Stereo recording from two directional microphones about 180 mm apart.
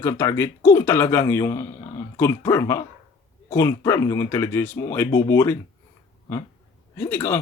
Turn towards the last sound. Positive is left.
turn(degrees=15)  # may be behind; listen again after turning